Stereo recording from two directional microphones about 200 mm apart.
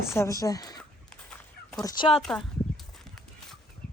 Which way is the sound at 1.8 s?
20° left (ahead or behind).